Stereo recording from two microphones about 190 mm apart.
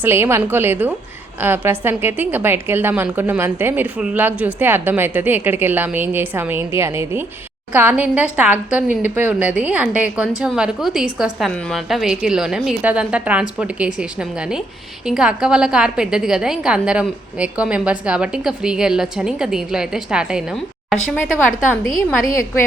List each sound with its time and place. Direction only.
0.0 s a woman's voice: 10° right (ahead or behind)